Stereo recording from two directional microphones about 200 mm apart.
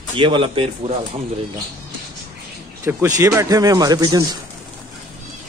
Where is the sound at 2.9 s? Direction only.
15° right (ahead or behind).